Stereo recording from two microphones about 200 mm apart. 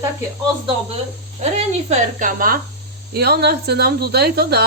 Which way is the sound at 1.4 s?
35° right (ahead or behind).